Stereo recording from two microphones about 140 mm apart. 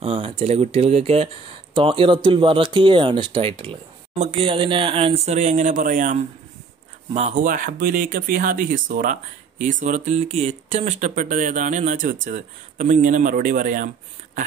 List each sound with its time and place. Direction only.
0.0 s speech: 45° right (ahead or behind); by 13.8 s 80° right